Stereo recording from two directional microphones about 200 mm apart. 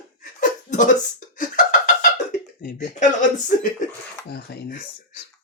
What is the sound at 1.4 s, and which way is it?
Beatboxing, 40° left (ahead or behind).